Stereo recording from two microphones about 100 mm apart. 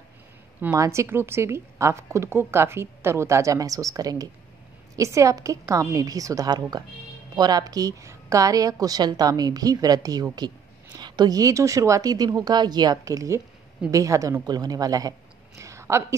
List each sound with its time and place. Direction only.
0.7 s a woman's voice: 30° right (ahead or behind)